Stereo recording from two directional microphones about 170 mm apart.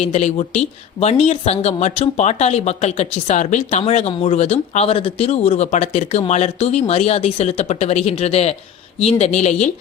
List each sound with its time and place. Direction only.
0.0 s speech: 40° left (ahead or behind)